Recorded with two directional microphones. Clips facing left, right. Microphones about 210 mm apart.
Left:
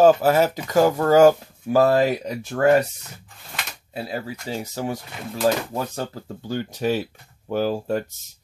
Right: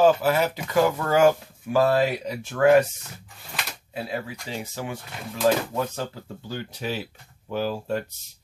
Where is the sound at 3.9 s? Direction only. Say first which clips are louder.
Left 2 dB; 35° left (ahead or behind).